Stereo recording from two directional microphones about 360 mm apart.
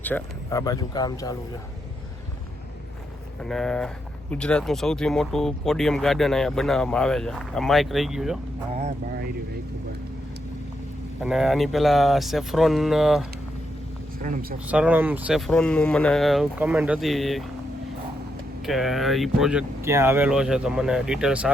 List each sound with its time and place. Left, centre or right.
0.0 s speech: centre
3.4 s speech: centre
8.8 s speech: right
11.2 s speech: centre
14.2 s speech: right
14.7 s speech: centre
18.6 s speech: centre